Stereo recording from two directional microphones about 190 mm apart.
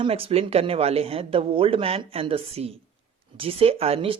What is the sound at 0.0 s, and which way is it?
Speech, 30° right (ahead or behind).